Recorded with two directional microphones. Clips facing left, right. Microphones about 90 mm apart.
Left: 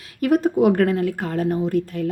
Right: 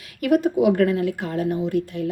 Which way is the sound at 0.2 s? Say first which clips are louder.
Left 1 dB; 35° left (ahead or behind).